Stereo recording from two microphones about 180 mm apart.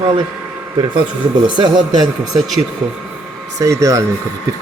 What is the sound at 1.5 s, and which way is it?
Speech, 25° right (ahead or behind).